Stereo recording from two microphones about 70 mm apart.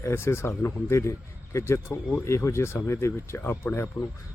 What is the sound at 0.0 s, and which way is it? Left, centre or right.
Speech, left.